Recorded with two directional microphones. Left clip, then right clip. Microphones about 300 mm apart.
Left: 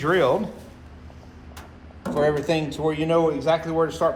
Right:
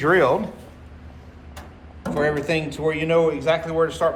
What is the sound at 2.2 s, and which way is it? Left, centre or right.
A man's voice, centre.